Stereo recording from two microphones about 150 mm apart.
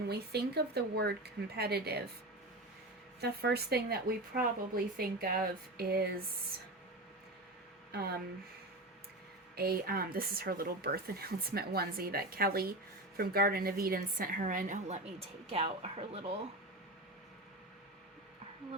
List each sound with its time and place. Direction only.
0.1 s a woman's voice: 90° right
3.2 s a woman's voice: 90° right
9.6 s a woman's voice: 90° right; by 16.3 s 40° right (ahead or behind)